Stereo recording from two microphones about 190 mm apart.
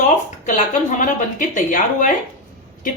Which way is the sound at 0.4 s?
40° left (ahead or behind).